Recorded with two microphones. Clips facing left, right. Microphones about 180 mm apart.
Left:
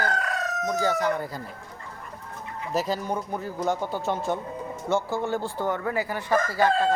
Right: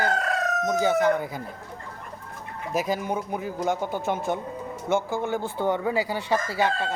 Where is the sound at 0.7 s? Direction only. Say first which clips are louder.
Right 3 dB; 20° right (ahead or behind).